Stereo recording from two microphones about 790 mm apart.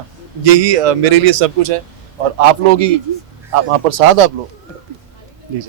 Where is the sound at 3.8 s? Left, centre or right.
Right.